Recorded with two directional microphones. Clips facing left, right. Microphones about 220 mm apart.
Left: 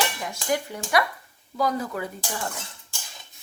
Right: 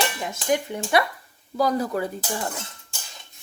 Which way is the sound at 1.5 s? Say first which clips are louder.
Right 3 dB; 35° right (ahead or behind).